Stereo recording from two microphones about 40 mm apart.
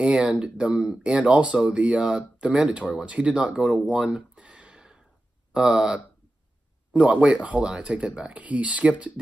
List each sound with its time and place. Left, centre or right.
0.0 s speech: right
4.1 s a sound: right
5.5 s speech: centre; by 9.2 s right